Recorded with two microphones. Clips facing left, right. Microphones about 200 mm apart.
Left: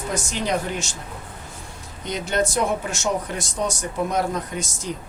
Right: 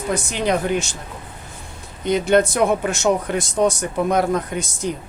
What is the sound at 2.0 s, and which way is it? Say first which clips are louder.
Speech: right 8 dB; 60° right (ahead or behind).